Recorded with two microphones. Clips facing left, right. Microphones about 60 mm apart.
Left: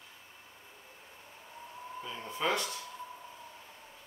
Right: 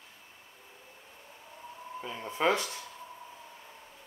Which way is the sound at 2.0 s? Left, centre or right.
Right.